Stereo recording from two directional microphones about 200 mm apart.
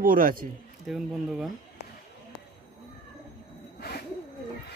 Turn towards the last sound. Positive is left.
turn(degrees=50)  # may be behind; listen again after turning